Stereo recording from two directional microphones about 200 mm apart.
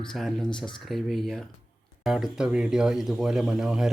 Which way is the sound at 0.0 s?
Centre (ahead or behind).